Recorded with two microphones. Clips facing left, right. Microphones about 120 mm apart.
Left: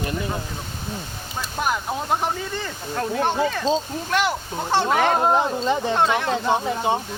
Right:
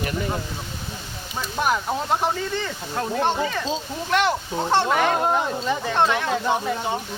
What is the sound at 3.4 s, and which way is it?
Speech, centre (ahead or behind).